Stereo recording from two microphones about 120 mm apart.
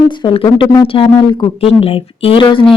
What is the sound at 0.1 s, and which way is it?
Speech, 45° left (ahead or behind).